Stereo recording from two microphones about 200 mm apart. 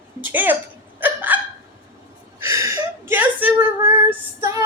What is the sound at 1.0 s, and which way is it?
Hiccup, 10° right (ahead or behind).